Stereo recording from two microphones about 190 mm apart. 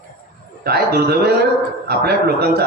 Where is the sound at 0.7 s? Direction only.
55° right (ahead or behind).